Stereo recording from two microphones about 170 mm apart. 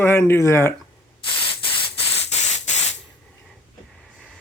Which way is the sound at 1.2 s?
30° left (ahead or behind).